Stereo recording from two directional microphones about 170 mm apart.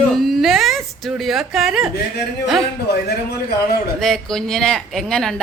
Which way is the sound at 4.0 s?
Centre (ahead or behind).